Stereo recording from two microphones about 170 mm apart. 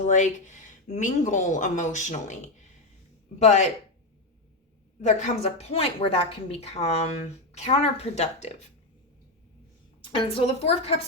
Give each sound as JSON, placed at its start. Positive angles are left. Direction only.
{"t": 0.9, "sound": "speech", "side_deg": 45}
{"t": 4.9, "sound": "a woman's voice", "side_deg": 45}
{"t": 10.2, "sound": "a woman's voice", "side_deg": 30}